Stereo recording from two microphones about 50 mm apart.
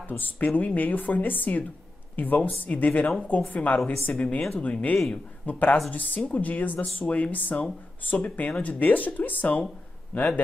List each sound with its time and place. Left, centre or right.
0.4 s speech: left